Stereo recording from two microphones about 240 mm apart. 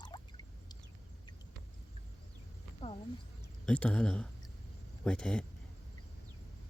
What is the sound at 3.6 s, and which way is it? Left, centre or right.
Speech, centre.